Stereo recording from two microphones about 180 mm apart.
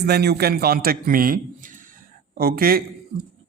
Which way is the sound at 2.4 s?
55° right (ahead or behind).